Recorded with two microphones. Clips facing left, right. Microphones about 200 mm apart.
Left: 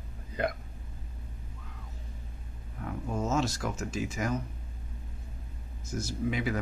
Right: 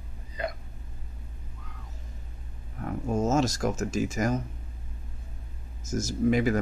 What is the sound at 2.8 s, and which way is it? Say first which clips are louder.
Speech: right 5 dB; 45° right (ahead or behind).